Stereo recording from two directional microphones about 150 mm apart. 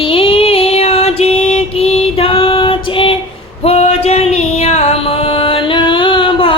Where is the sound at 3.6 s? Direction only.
45° left (ahead or behind).